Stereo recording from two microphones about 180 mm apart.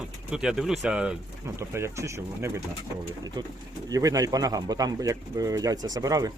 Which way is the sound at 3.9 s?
20° right (ahead or behind).